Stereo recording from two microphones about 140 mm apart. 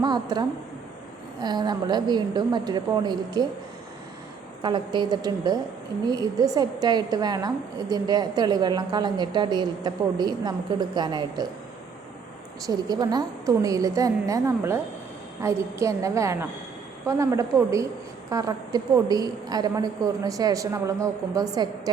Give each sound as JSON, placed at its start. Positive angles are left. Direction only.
{"t": 0.0, "sound": "a woman's voice", "side_deg": -30}
{"t": 4.6, "sound": "a woman's voice", "side_deg": -35}
{"t": 12.6, "sound": "a woman's voice", "side_deg": -30}